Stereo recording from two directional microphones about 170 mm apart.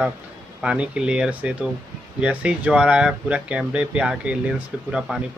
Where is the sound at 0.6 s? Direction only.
5° right (ahead or behind).